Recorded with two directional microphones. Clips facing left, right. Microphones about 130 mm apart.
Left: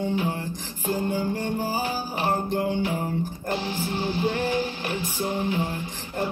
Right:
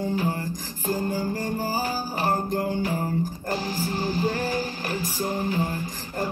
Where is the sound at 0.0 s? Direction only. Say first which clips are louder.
Even; 40° right (ahead or behind).